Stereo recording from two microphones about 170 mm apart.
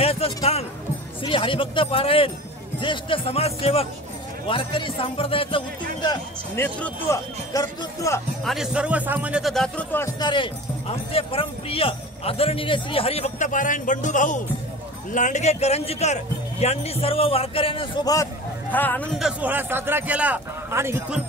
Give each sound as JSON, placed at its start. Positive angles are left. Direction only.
{"t": 0.0, "sound": "a man's voice", "side_deg": 35}
{"t": 6.5, "sound": "speech", "side_deg": 15}
{"t": 8.5, "sound": "speech", "side_deg": -5}
{"t": 9.9, "sound": "a man's voice", "side_deg": 20}
{"t": 18.7, "sound": "speech", "side_deg": 10}
{"t": 19.1, "sound": "a man's voice", "side_deg": -5}